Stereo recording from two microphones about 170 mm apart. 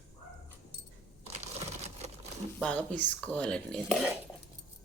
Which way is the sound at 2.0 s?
40° right (ahead or behind).